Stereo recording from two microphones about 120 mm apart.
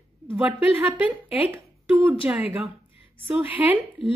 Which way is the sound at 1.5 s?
20° right (ahead or behind).